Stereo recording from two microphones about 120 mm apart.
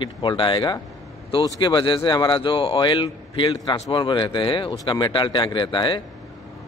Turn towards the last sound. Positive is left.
turn(degrees=40)  # may be behind; listen again after turning